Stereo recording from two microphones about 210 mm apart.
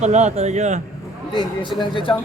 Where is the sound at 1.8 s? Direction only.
25° left (ahead or behind).